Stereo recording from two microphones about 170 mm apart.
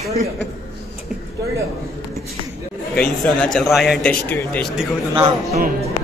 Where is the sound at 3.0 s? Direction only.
5° left (ahead or behind).